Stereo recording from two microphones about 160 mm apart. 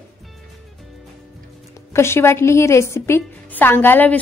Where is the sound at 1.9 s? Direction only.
15° left (ahead or behind).